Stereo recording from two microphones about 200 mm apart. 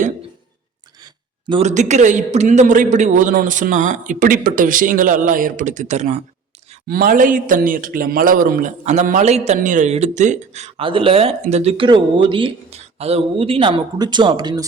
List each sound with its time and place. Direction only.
1.0 s a sound: 25° right (ahead or behind)
1.6 s a man's voice: 35° right (ahead or behind)
6.8 s a man's voice: 45° right (ahead or behind); by 14.6 s 20° right (ahead or behind)